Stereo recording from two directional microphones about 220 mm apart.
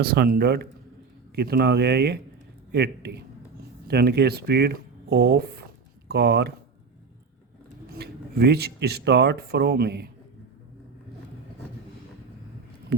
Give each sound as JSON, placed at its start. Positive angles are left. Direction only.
{"t": 0.0, "sound": "speech", "side_deg": -45}
{"t": 7.9, "sound": "speech", "side_deg": -50}